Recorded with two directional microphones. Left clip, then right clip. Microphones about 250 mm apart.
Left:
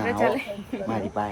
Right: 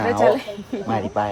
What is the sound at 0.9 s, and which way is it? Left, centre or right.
Speech, right.